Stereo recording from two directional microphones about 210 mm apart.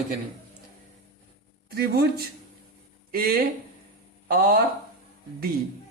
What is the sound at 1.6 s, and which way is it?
Speech, 45° right (ahead or behind).